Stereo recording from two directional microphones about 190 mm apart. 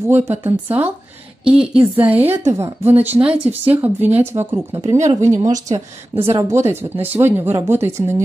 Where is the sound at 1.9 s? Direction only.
10° right (ahead or behind).